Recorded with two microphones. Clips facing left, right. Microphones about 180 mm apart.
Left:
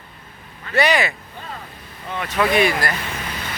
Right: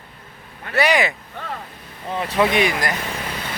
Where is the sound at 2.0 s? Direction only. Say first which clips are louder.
Right 3 dB; 30° right (ahead or behind).